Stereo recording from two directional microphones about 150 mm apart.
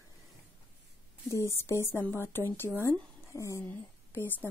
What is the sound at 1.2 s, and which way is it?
A woman's voice, 20° left (ahead or behind).